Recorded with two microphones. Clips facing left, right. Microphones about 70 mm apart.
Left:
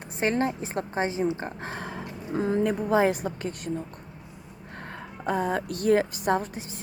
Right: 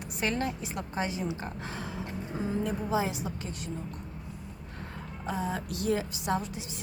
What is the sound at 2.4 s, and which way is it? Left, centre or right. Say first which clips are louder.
A woman's voice: left 7 dB; left.